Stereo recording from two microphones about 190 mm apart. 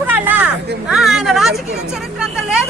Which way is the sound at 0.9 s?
Centre (ahead or behind).